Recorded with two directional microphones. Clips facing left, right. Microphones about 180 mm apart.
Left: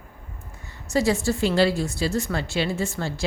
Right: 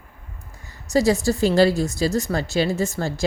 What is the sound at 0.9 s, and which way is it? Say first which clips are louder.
A woman's voice: right 3 dB; 40° right (ahead or behind).